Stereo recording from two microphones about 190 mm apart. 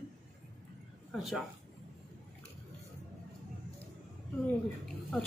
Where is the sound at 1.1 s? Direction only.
Centre (ahead or behind).